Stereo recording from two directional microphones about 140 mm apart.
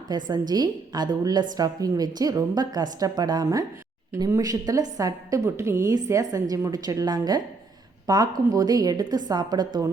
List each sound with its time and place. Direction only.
0.3 s a woman's voice: 30° right (ahead or behind)